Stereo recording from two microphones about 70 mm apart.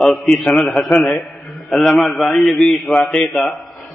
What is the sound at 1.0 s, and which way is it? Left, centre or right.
A man's voice, centre.